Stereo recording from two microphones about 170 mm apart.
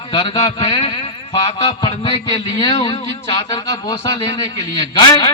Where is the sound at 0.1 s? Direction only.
30° left (ahead or behind).